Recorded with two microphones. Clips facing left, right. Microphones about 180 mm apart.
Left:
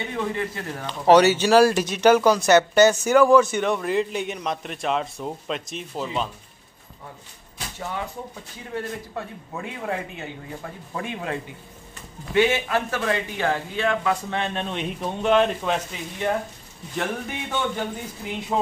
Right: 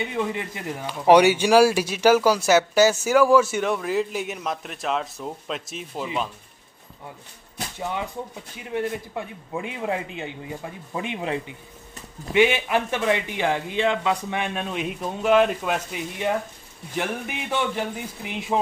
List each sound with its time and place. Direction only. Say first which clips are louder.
0.1 s a man's voice: even; 15° right (ahead or behind)
7.8 s a man's voice: right 2 dB; 20° right (ahead or behind)